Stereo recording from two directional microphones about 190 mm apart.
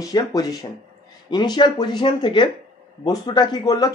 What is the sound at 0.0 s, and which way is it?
Speech, 20° left (ahead or behind).